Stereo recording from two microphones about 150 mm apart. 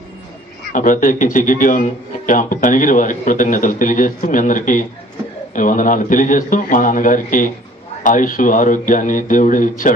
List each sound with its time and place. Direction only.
0.7 s a man's voice: 60° left (ahead or behind)